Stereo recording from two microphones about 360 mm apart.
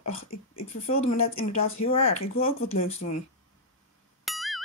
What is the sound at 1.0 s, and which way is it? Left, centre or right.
Speech, left.